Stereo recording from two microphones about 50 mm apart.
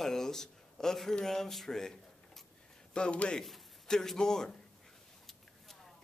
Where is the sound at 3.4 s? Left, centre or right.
Centre.